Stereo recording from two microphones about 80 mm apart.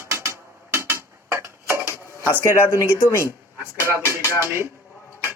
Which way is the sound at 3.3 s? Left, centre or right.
Right.